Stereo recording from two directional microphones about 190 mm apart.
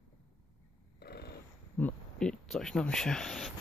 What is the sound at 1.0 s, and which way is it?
Purr, 60° left (ahead or behind).